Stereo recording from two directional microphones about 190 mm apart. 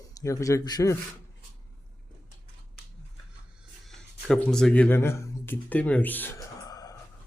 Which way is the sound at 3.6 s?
Centre (ahead or behind).